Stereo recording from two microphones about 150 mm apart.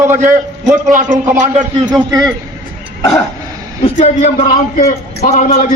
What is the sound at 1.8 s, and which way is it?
Speech, 25° right (ahead or behind).